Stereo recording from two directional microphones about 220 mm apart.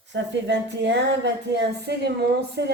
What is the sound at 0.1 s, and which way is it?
Speech, 55° right (ahead or behind).